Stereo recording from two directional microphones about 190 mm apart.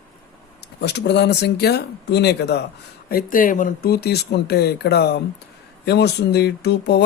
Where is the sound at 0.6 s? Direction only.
60° left (ahead or behind).